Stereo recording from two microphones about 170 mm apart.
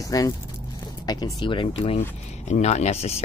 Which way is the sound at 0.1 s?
20° left (ahead or behind).